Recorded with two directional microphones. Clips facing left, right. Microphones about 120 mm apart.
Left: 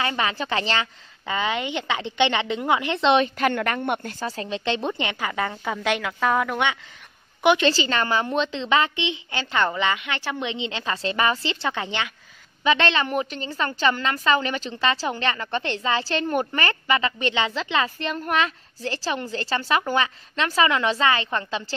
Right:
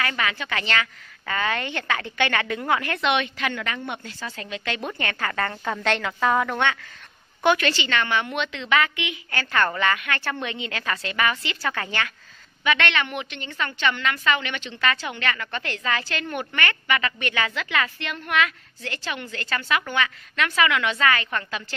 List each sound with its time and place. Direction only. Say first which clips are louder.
0.0 s a woman's voice: left 2 dB; 25° left (ahead or behind)
1.2 s a woman's voice: left 1 dB; 15° left (ahead or behind)
3.3 s a woman's voice: left 6 dB; 50° left (ahead or behind); by 6.6 s centre (ahead or behind)
7.4 s a woman's voice: left 2 dB; 20° left (ahead or behind)
7.7 s a woman's voice: left 2 dB; 35° left (ahead or behind); by 12.1 s 20° left (ahead or behind)
12.6 s a woman's voice: left 3 dB; 30° left (ahead or behind)
17.9 s a woman's voice: left 1 dB; 35° left (ahead or behind)